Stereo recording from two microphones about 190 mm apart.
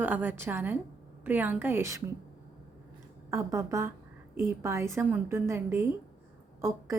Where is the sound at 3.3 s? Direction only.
15° right (ahead or behind).